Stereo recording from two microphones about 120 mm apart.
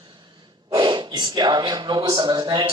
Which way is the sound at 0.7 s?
35° right (ahead or behind).